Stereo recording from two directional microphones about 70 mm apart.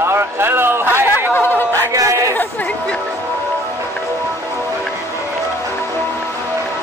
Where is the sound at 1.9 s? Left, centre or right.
Right.